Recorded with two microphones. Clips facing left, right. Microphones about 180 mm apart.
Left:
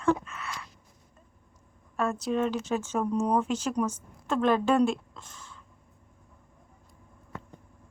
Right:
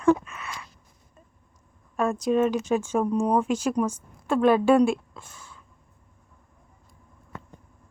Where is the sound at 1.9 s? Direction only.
15° right (ahead or behind).